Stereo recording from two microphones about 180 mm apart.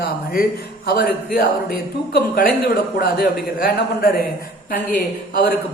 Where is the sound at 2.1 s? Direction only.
50° left (ahead or behind).